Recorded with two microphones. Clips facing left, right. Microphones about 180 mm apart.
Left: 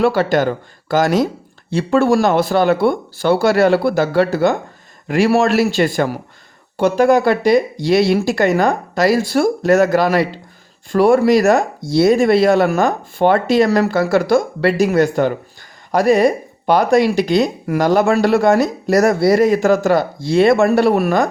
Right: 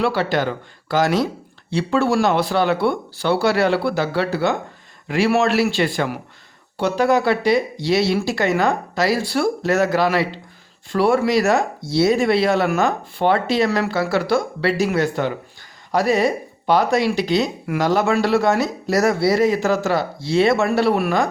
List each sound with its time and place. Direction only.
0.0 s speech: 45° left (ahead or behind)